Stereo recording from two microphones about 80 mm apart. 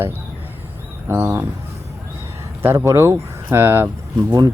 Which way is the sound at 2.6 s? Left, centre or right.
Right.